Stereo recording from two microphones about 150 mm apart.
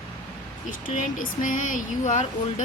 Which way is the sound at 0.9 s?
60° left (ahead or behind).